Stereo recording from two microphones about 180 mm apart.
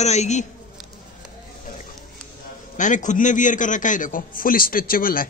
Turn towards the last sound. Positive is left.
turn(degrees=50)  # may be behind; listen again after turning